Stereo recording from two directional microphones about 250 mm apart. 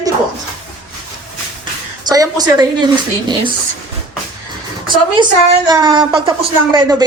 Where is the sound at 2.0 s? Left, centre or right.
Centre.